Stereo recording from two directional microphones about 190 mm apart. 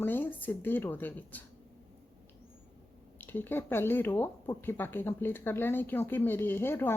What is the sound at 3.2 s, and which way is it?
Speech, 10° left (ahead or behind).